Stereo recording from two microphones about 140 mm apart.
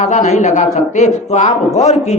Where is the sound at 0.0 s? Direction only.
60° left (ahead or behind).